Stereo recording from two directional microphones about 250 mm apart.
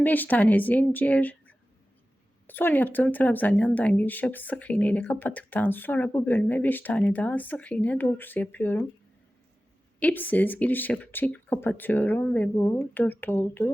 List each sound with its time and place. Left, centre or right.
0.0 s speech: centre
10.0 s speech: centre